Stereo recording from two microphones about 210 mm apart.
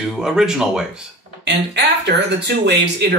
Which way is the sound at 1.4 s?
55° right (ahead or behind).